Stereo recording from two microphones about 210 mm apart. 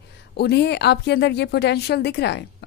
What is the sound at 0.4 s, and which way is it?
A woman's voice, 50° left (ahead or behind).